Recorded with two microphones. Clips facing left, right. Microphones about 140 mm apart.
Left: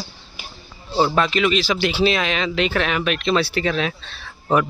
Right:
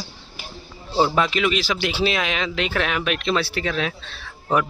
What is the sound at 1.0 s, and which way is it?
Speech, 5° right (ahead or behind).